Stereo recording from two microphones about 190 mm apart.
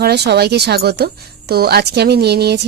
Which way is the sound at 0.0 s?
60° right (ahead or behind).